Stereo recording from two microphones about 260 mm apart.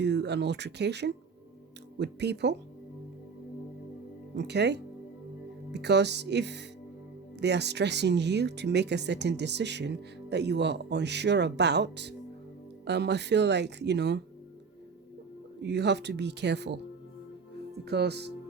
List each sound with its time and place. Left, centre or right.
0.0 s speech: right
4.4 s speech: right
15.6 s speech: right
17.8 s speech: right